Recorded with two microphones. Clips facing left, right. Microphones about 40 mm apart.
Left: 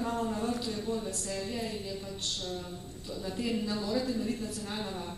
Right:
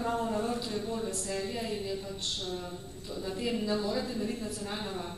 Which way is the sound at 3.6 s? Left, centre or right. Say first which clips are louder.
Right 1 dB; centre.